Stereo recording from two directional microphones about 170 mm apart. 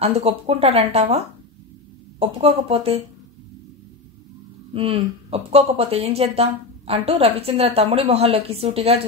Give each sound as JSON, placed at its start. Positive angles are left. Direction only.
{"t": 0.0, "sound": "speech", "side_deg": -35}
{"t": 4.7, "sound": "speech", "side_deg": -35}